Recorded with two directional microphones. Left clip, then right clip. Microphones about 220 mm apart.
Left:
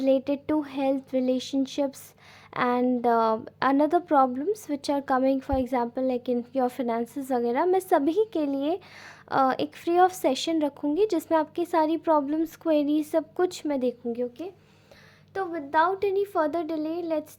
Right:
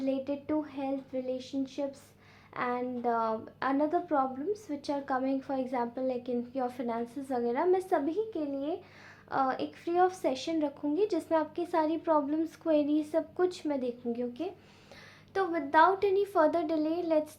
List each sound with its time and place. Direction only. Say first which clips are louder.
0.0 s a woman's voice: left 9 dB; 45° left (ahead or behind)